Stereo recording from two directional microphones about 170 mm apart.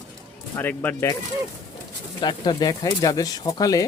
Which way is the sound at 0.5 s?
10° left (ahead or behind).